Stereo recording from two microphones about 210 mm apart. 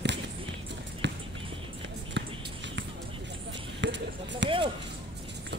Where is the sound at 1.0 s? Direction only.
60° right (ahead or behind).